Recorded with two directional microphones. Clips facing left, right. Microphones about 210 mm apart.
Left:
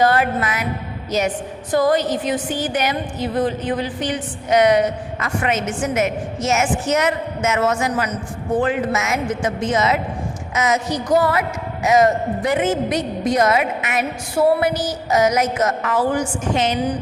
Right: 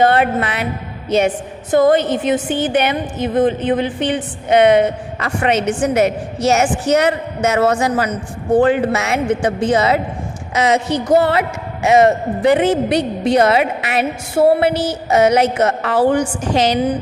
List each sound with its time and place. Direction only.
0.0 s a woman's voice: 25° right (ahead or behind)
1.7 s a woman's voice: 25° right (ahead or behind)